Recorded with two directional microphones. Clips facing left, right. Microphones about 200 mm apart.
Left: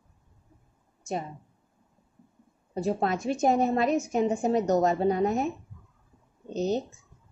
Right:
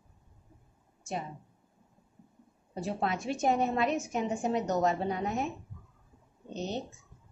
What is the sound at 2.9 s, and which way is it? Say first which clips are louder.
A woman's voice: left 5 dB; 40° left (ahead or behind).